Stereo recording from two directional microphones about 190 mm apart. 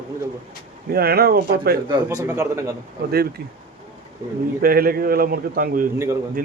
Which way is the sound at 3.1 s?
55° right (ahead or behind).